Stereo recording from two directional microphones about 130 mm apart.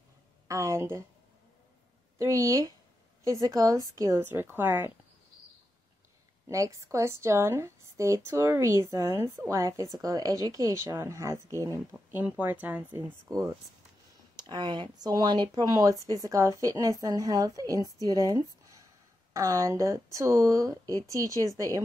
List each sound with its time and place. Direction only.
0.5 s speech: 20° right (ahead or behind)
2.1 s a woman's voice: 20° right (ahead or behind)
6.5 s a woman's voice: 25° right (ahead or behind)
13.3 s a woman's voice: 25° right (ahead or behind)
18.0 s a sound: 30° right (ahead or behind)
19.3 s a woman's voice: 20° right (ahead or behind)